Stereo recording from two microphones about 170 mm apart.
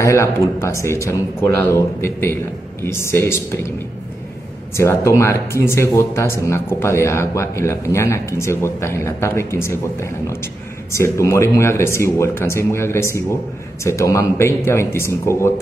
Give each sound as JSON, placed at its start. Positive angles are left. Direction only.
{"t": 0.0, "sound": "speech", "side_deg": 15}
{"t": 4.7, "sound": "speech", "side_deg": 15}